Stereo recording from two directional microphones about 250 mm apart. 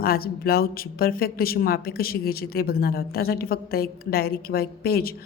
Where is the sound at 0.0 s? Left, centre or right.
Left.